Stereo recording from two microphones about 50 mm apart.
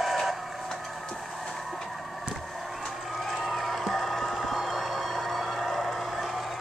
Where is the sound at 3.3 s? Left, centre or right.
Centre.